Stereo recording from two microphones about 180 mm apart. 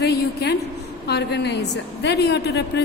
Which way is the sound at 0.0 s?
65° left (ahead or behind).